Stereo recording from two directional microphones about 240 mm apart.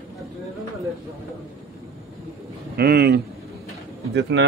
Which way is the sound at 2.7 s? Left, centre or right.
Right.